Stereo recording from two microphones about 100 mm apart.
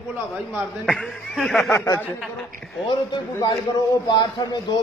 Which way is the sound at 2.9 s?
50° left (ahead or behind).